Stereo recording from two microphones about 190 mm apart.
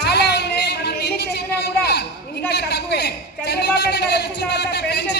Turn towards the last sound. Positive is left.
turn(degrees=60)  # may be behind; listen again after turning